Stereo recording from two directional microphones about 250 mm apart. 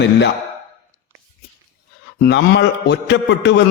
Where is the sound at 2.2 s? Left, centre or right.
Left.